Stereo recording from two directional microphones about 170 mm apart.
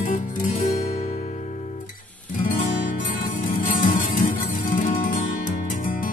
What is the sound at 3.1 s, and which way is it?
Music, 55° left (ahead or behind).